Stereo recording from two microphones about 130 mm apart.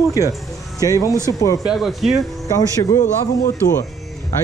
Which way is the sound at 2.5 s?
25° left (ahead or behind).